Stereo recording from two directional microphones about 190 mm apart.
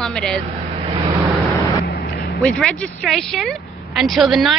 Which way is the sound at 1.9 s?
55° left (ahead or behind).